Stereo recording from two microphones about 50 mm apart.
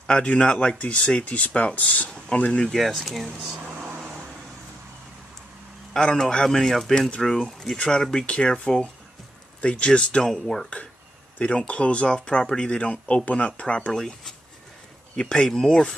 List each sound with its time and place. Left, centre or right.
0.0 s speech: centre
2.0 s speech: centre
2.3 s speech: left
2.6 s speech: centre
5.9 s speech: centre
10.2 s speech: centre
11.3 s speech: left
13.9 s speech: centre